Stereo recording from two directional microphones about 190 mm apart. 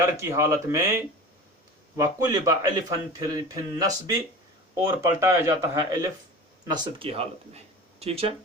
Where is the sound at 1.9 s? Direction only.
20° right (ahead or behind).